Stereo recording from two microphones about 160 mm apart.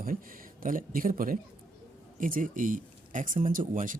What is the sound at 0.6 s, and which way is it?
Speech, 60° right (ahead or behind).